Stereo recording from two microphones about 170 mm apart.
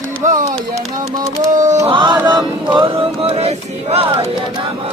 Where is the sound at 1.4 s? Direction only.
45° right (ahead or behind).